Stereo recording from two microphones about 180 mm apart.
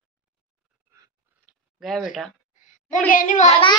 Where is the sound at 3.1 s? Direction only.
45° left (ahead or behind).